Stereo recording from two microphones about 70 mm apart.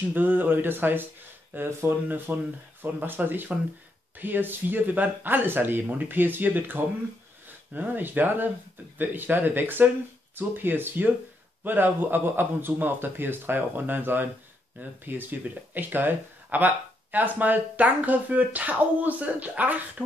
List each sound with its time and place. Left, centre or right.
0.1 s speech: right